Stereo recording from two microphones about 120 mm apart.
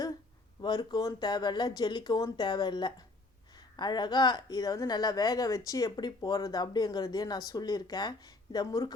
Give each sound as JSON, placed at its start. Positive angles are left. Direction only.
{"t": 0.6, "sound": "a woman's voice", "side_deg": 40}